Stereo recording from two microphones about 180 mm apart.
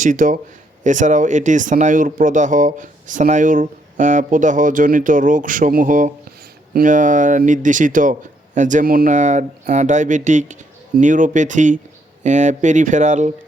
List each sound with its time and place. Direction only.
0.0 s speech: 45° right (ahead or behind)